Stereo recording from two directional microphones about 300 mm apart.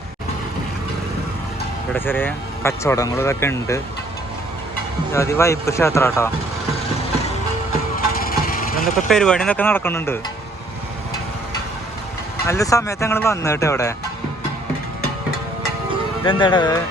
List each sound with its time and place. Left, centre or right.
1.9 s speech: centre
5.1 s speech: centre
7.9 s vehicle: left
9.0 s speech: centre
12.5 s speech: centre
16.2 s speech: centre